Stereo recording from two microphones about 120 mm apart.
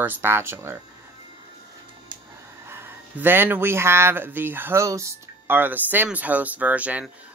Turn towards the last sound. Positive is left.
turn(degrees=-10)  # may be behind; listen again after turning